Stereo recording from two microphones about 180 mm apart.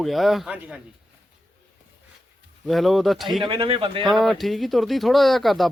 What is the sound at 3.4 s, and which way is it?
Speech, 30° right (ahead or behind).